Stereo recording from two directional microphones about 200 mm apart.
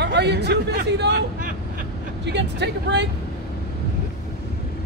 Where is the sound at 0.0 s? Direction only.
60° right (ahead or behind).